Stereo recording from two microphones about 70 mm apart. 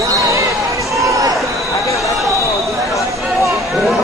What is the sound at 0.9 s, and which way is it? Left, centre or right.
Run, right.